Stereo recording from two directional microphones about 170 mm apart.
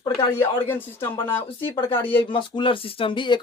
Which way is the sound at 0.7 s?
10° left (ahead or behind).